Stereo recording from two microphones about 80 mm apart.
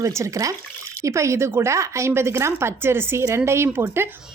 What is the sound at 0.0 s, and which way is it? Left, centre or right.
A woman's voice, right.